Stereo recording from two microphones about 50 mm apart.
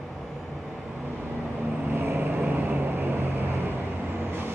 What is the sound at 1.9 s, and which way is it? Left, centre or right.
Vehicle, right.